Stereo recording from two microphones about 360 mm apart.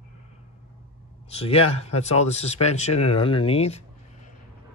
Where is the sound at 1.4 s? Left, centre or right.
Centre.